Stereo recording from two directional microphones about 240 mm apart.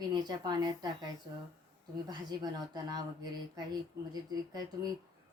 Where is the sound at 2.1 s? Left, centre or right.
Centre.